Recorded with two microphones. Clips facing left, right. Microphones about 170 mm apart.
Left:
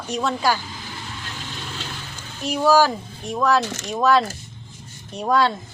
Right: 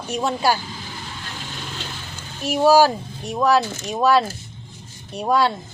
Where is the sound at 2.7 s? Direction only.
15° right (ahead or behind).